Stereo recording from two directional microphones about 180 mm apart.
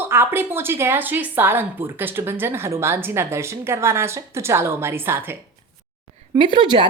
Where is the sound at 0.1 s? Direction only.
15° right (ahead or behind).